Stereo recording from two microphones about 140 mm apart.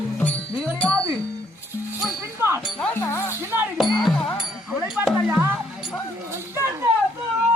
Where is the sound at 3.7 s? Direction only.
Centre (ahead or behind).